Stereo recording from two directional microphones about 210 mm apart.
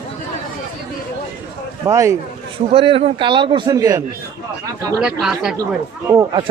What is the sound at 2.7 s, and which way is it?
Speech, 25° right (ahead or behind).